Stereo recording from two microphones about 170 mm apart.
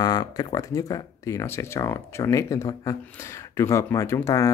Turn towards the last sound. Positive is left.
turn(degrees=20)  # may be behind; listen again after turning